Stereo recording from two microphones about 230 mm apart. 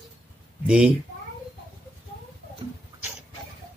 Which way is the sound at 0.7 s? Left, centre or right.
Centre.